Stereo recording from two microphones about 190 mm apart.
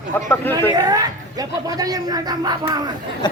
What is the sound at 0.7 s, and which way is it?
Speech, 20° right (ahead or behind).